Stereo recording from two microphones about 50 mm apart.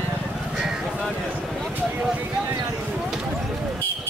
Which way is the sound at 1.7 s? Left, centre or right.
Right.